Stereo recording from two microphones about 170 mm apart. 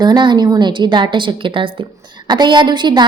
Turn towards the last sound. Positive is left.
turn(degrees=-25)  # may be behind; listen again after turning